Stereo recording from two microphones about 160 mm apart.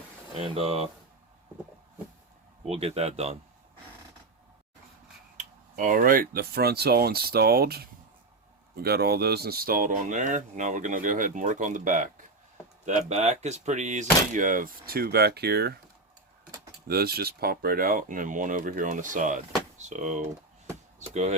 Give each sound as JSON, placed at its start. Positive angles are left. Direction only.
{"t": 0.3, "sound": "speech", "side_deg": -40}
{"t": 2.6, "sound": "speech", "side_deg": -40}
{"t": 5.4, "sound": "speech", "side_deg": -55}
{"t": 16.8, "sound": "speech", "side_deg": -75}